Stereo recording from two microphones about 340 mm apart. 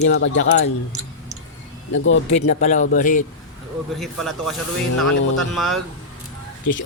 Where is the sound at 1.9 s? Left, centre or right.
Left.